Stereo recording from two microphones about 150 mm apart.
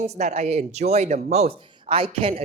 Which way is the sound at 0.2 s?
50° right (ahead or behind).